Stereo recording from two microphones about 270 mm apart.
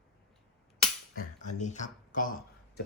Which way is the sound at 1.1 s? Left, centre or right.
Left.